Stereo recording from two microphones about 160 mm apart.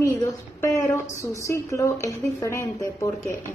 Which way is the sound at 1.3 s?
20° left (ahead or behind).